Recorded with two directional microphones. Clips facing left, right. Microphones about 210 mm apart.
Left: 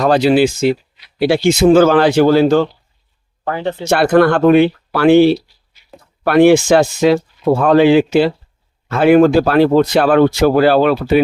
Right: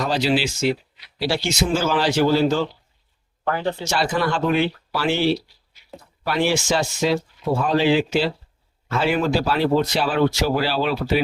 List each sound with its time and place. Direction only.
0.0 s speech: 55° left (ahead or behind)
3.8 s speech: 60° left (ahead or behind)